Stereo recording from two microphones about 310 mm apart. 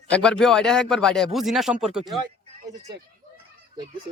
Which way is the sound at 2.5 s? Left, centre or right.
Right.